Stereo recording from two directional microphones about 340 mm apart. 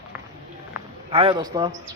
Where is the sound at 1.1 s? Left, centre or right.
Centre.